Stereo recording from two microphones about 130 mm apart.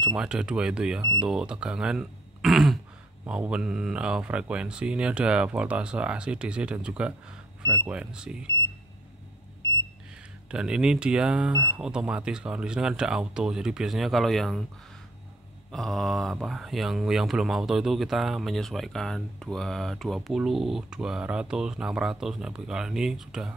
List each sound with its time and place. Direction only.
0.0 s speech: 5° right (ahead or behind)
10.5 s speech: 5° right (ahead or behind)
15.7 s speech: 5° left (ahead or behind)